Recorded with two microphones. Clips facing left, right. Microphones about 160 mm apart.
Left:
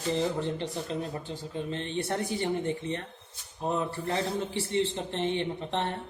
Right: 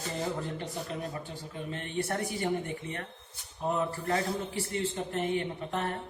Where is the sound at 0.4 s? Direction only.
30° left (ahead or behind).